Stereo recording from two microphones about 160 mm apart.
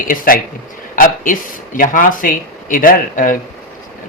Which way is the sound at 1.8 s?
55° left (ahead or behind).